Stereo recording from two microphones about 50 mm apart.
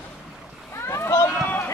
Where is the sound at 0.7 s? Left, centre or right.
Left.